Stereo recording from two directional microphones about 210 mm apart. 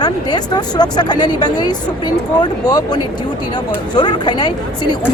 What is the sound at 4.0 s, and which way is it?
Speech, 20° left (ahead or behind).